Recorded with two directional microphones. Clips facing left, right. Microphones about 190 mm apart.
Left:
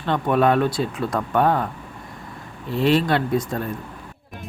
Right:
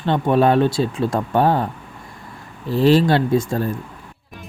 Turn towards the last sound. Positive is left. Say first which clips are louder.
# right 4 dB
turn(degrees=-30)  # may be behind; listen again after turning